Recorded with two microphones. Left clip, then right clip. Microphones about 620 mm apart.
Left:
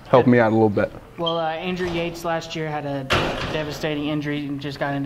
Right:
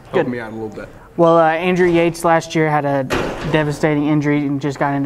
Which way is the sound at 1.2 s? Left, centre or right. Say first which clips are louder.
Right 12 dB; right.